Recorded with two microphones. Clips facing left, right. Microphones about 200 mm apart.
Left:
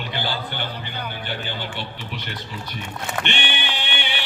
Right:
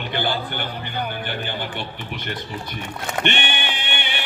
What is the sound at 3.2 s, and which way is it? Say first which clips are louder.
Music: right 6 dB; 50° right (ahead or behind).